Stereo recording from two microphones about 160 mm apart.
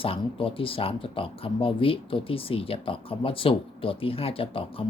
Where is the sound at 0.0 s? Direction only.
35° left (ahead or behind).